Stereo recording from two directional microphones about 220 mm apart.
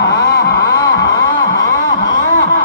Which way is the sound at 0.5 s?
15° left (ahead or behind).